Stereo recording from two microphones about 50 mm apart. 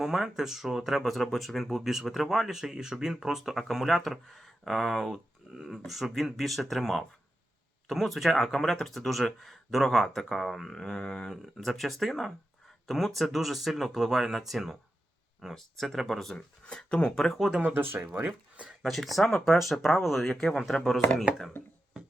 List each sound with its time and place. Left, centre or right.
0.0 s speech: centre
8.5 s speech: centre
16.6 s speech: centre
17.2 s speech: centre
17.6 s speech: right
18.8 s speech: centre
20.2 s speech: centre